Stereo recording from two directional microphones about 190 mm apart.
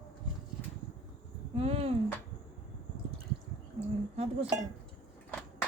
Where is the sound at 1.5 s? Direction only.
30° right (ahead or behind).